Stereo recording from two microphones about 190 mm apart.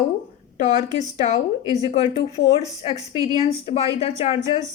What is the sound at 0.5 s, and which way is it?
A woman's voice, 40° left (ahead or behind).